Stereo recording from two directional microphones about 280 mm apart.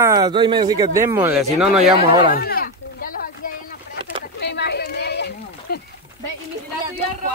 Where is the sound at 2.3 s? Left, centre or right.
Left.